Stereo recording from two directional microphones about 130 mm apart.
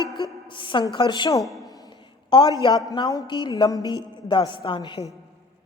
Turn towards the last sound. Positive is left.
turn(degrees=40)  # may be behind; listen again after turning